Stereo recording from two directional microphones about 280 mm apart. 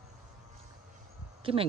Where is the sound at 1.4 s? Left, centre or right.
Centre.